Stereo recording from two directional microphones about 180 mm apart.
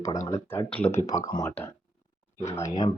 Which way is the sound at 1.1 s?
20° left (ahead or behind).